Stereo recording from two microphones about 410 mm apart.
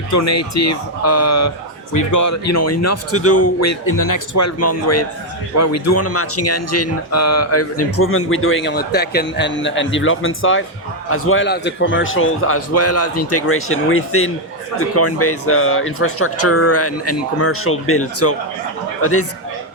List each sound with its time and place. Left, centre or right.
0.1 s speech: left